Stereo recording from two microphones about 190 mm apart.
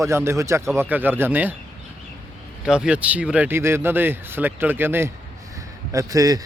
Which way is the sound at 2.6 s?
5° right (ahead or behind).